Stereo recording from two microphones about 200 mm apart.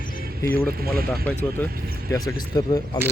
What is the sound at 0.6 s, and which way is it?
Speech, 50° right (ahead or behind).